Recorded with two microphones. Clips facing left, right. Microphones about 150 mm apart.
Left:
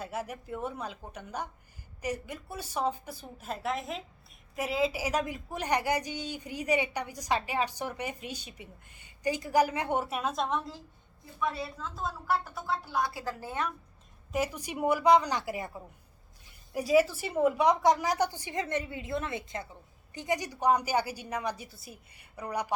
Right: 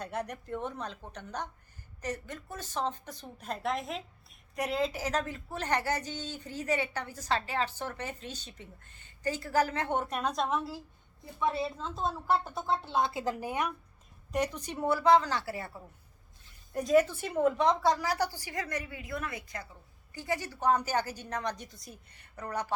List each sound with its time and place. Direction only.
0.0 s speech: 5° left (ahead or behind)
11.3 s a woman's voice: 25° right (ahead or behind)
14.3 s a woman's voice: 5° left (ahead or behind)